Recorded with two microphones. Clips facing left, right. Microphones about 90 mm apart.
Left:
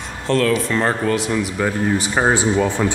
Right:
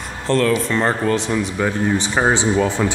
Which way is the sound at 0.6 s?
Centre (ahead or behind).